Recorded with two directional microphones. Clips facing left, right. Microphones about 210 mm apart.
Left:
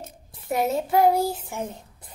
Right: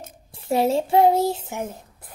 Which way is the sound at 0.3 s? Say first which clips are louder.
Right 4 dB; 30° right (ahead or behind).